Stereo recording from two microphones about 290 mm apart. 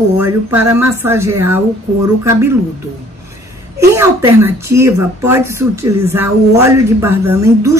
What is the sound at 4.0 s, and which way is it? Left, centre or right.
Speech, centre.